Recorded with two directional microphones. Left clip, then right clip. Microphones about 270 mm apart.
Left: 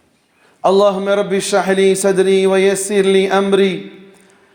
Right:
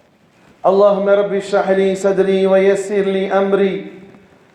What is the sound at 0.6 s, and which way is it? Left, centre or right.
A man's voice, left.